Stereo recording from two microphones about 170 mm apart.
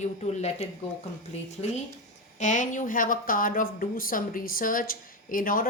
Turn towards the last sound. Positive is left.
turn(degrees=55)  # may be behind; listen again after turning